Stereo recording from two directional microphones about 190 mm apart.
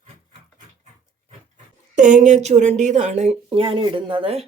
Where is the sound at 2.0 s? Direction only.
40° right (ahead or behind).